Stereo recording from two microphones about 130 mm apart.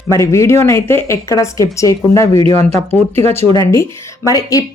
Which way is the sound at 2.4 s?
55° right (ahead or behind).